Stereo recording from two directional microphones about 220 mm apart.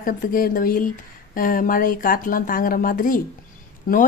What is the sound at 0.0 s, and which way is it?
Speech, 40° left (ahead or behind).